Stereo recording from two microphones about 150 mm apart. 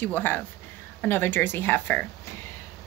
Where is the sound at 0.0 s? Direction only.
10° left (ahead or behind).